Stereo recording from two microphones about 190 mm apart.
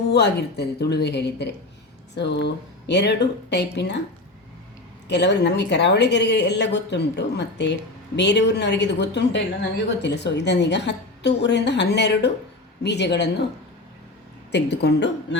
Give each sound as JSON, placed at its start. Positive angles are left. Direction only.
{"t": 0.1, "sound": "a woman's voice", "side_deg": 60}
{"t": 5.0, "sound": "a woman's voice", "side_deg": 65}
{"t": 14.5, "sound": "a woman's voice", "side_deg": 60}